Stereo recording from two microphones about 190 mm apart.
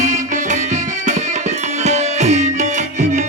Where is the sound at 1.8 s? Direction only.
35° right (ahead or behind).